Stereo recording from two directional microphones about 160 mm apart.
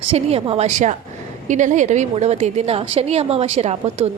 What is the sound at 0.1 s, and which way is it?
A woman's voice, 35° right (ahead or behind).